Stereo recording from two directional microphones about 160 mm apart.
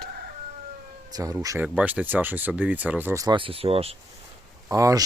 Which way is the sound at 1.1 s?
25° right (ahead or behind).